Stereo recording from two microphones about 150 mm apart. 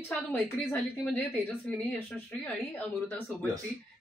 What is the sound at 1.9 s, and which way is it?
Speech, centre (ahead or behind).